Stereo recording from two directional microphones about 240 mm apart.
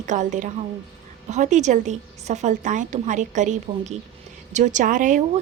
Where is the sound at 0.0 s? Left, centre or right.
Right.